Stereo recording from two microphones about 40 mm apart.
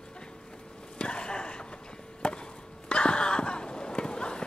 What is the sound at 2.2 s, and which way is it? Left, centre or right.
Chop, left.